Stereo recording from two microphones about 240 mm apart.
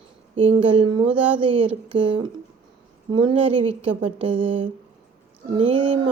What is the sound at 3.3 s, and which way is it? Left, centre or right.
Speech, right.